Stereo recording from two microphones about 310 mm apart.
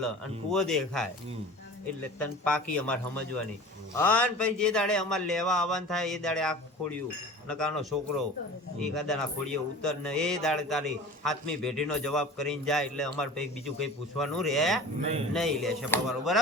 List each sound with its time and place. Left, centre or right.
0.5 s a man's voice: centre
2.1 s a man's voice: centre